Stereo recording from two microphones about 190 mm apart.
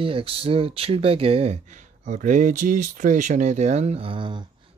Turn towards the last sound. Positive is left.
turn(degrees=-25)  # may be behind; listen again after turning